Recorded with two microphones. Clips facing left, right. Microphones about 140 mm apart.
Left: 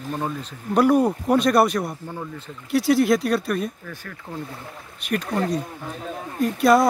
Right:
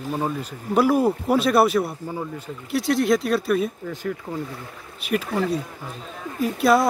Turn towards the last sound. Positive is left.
turn(degrees=0)  # may be behind; listen again after turning